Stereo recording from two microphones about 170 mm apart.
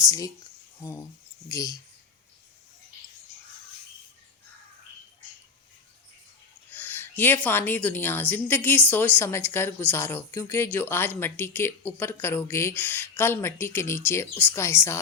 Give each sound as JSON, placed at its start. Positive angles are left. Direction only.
{"t": 0.0, "sound": "a woman's voice", "side_deg": 20}
{"t": 6.7, "sound": "a woman's voice", "side_deg": 10}